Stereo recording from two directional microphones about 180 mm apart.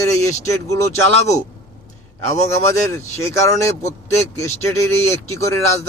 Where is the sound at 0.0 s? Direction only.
15° left (ahead or behind).